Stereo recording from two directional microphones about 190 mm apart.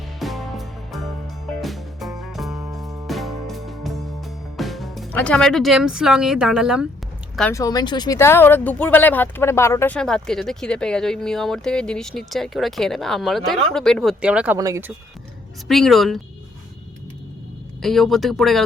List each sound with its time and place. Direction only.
0.2 s music: centre (ahead or behind)
2.6 s music: 15° right (ahead or behind)
3.1 s music: centre (ahead or behind)
4.5 s speech: centre (ahead or behind)
7.5 s speech: 20° left (ahead or behind); by 14.9 s 15° right (ahead or behind)
15.6 s speech: centre (ahead or behind)
17.8 s speech: centre (ahead or behind)